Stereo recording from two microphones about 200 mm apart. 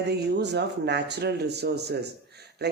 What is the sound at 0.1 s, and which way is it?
Speech, 60° right (ahead or behind).